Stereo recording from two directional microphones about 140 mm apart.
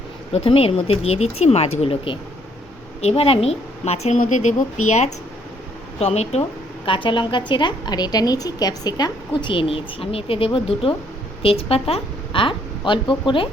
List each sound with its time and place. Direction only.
0.3 s a woman's voice: 45° left (ahead or behind)
6.8 s a woman's voice: 35° left (ahead or behind)